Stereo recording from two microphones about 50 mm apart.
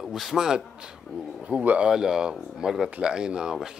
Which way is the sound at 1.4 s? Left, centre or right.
Right.